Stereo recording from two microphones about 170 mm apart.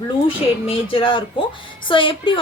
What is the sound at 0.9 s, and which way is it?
A woman's voice, 30° left (ahead or behind).